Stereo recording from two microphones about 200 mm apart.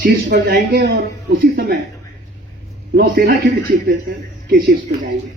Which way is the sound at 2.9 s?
45° right (ahead or behind).